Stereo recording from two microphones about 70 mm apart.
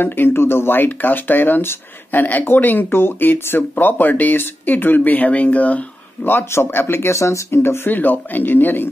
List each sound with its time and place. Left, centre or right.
0.0 s speech: left
6.2 s speech: left